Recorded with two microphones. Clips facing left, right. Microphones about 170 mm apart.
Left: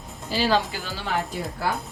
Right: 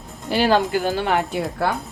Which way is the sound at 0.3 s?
55° right (ahead or behind).